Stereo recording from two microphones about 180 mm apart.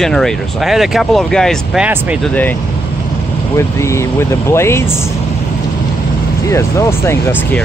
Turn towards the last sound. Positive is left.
turn(degrees=10)  # may be behind; listen again after turning